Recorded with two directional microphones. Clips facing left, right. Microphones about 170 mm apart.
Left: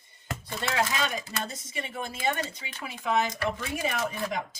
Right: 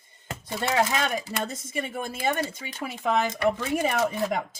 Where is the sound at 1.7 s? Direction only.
50° right (ahead or behind).